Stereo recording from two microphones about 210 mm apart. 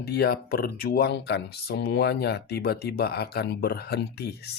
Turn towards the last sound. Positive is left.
turn(degrees=50)  # may be behind; listen again after turning